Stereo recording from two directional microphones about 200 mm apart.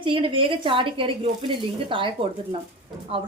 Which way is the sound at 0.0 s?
25° right (ahead or behind).